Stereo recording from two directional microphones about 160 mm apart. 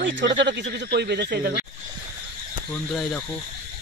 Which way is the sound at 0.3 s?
90° right.